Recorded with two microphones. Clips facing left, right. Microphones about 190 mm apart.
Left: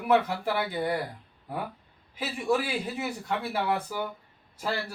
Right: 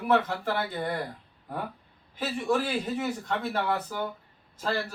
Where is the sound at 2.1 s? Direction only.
10° left (ahead or behind).